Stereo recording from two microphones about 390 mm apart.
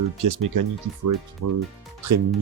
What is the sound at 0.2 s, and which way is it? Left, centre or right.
Speech, right.